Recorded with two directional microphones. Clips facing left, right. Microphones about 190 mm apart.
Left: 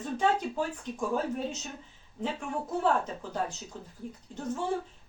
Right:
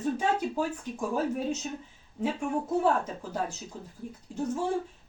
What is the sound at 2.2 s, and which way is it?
Speech, 10° right (ahead or behind).